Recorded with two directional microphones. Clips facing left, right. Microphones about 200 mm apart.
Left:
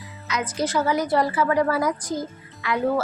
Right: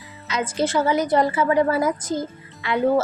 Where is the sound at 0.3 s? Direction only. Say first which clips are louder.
Right 3 dB; 30° right (ahead or behind).